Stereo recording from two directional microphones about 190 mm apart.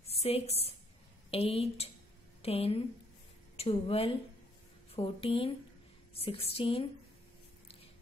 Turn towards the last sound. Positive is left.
turn(degrees=30)  # may be behind; listen again after turning